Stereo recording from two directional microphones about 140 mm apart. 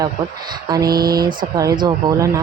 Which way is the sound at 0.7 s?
30° right (ahead or behind).